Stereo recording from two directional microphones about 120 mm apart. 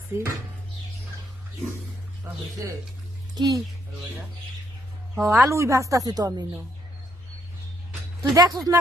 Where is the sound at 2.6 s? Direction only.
30° right (ahead or behind).